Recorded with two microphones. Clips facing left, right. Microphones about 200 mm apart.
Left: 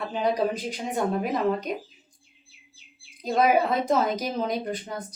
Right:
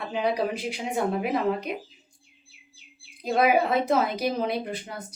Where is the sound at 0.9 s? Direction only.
10° right (ahead or behind).